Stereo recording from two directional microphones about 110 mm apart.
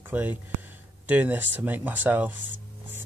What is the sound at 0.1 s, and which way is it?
Speech, 15° right (ahead or behind).